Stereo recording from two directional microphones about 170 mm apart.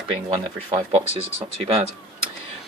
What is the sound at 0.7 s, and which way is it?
Speech, 30° right (ahead or behind).